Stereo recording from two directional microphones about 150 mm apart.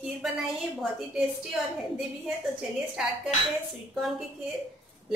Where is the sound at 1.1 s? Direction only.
Centre (ahead or behind).